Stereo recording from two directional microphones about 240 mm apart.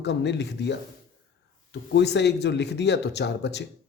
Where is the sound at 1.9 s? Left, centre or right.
Left.